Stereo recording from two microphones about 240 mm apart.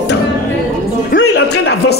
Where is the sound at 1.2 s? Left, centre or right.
Left.